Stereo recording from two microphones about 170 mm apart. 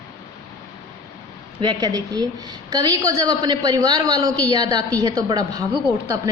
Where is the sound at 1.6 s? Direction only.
25° right (ahead or behind).